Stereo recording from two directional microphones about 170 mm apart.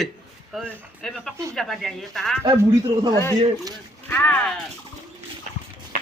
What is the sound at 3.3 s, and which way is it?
Speech, 20° right (ahead or behind).